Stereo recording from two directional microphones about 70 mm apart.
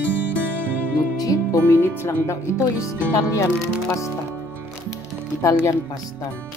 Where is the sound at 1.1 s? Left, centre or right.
Left.